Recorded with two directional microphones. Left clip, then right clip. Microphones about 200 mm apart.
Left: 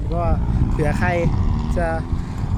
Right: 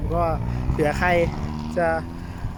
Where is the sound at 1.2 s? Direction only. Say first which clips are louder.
Left 3 dB; 50° right (ahead or behind).